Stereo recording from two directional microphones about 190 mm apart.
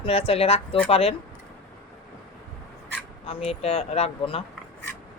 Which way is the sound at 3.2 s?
30° left (ahead or behind).